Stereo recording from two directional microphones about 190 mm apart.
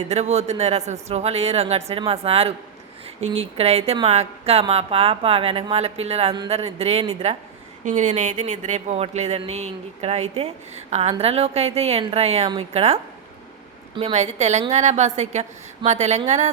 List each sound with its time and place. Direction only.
0.1 s speech: 35° right (ahead or behind)